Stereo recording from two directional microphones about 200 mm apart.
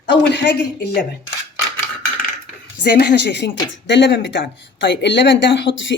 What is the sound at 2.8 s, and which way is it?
Speech, 60° left (ahead or behind).